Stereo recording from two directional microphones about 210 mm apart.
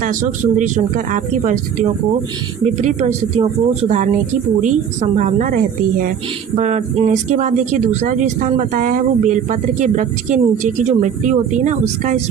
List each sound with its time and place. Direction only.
0.0 s speech: 40° right (ahead or behind)